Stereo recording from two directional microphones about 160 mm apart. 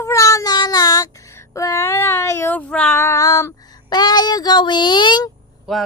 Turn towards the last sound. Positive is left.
turn(degrees=0)  # may be behind; listen again after turning